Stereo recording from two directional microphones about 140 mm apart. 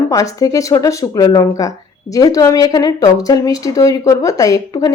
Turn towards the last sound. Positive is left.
turn(degrees=25)  # may be behind; listen again after turning